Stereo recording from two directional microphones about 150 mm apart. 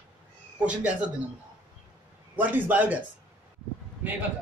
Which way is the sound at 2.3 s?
10° right (ahead or behind).